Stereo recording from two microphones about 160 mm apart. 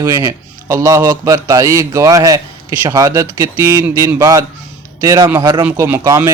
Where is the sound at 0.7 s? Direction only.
20° right (ahead or behind).